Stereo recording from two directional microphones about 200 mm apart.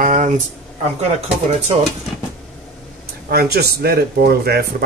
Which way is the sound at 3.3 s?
50° right (ahead or behind).